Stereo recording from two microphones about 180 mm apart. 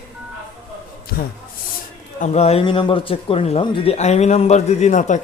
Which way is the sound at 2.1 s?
40° left (ahead or behind).